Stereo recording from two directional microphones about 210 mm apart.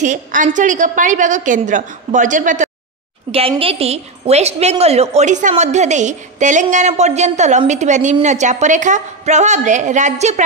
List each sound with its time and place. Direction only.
0.0 s a woman's voice: 35° right (ahead or behind)